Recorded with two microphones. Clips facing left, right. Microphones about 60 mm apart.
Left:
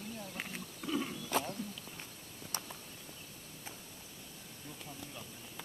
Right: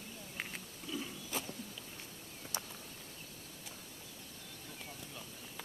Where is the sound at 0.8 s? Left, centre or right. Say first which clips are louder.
Left 7 dB; left.